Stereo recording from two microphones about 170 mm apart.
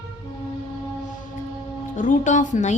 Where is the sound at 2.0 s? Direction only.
45° left (ahead or behind).